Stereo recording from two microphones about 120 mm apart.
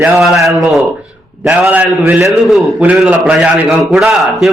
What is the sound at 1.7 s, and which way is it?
Speech, 15° right (ahead or behind).